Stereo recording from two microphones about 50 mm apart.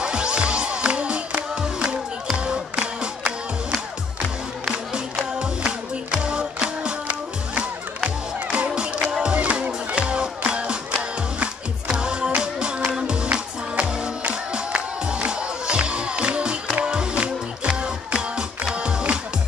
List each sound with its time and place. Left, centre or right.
0.0 s music: centre
4.6 s music: centre